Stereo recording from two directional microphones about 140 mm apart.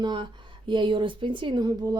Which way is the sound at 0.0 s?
35° right (ahead or behind).